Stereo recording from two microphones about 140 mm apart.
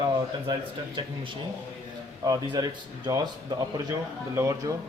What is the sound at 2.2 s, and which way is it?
Speech, 25° right (ahead or behind).